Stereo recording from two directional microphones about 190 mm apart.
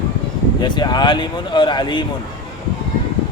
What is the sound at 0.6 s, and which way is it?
A man's voice, 25° left (ahead or behind).